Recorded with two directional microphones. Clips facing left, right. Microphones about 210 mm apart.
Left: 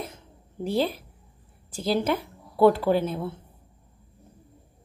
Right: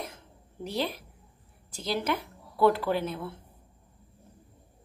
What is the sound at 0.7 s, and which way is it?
Speech, 30° left (ahead or behind).